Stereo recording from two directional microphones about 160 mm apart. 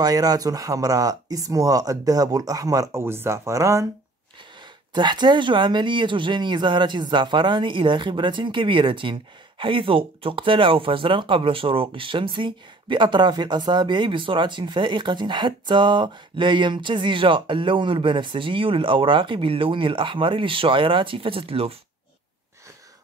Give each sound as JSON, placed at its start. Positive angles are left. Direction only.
{"t": 0.0, "sound": "speech", "side_deg": -25}
{"t": 4.9, "sound": "speech", "side_deg": -30}